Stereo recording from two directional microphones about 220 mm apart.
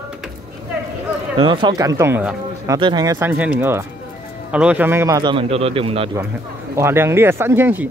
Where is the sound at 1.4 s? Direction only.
20° right (ahead or behind).